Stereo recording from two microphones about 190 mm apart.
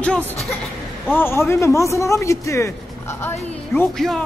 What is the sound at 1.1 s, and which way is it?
Speech, 10° left (ahead or behind).